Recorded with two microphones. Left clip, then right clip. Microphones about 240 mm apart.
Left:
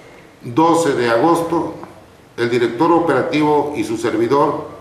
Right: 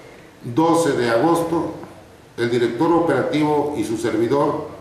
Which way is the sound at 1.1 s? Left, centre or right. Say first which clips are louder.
Left 4 dB; centre.